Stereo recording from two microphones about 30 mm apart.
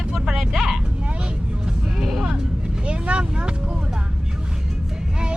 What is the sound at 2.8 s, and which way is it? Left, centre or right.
Vehicle, right.